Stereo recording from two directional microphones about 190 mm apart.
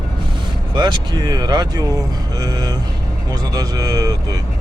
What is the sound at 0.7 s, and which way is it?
Speech, 25° right (ahead or behind).